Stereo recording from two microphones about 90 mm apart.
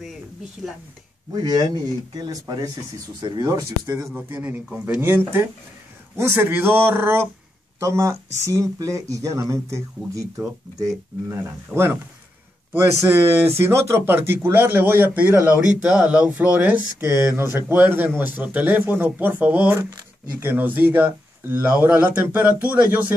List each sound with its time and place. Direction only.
0.6 s speech: centre (ahead or behind)
1.3 s speech: 50° right (ahead or behind)
3.5 s speech: 35° right (ahead or behind)
4.3 s speech: 20° right (ahead or behind)
13.1 s speech: 25° right (ahead or behind)
15.5 s speech: 10° right (ahead or behind)